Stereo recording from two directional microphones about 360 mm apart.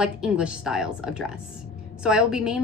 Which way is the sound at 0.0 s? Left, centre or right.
Centre.